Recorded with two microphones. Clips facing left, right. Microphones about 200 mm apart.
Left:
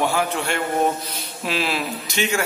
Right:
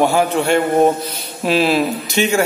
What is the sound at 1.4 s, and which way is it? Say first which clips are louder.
Speech: right 9 dB; 35° right (ahead or behind).